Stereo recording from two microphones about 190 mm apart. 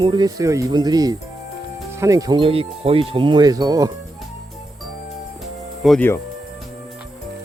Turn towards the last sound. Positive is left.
turn(degrees=0)  # may be behind; listen again after turning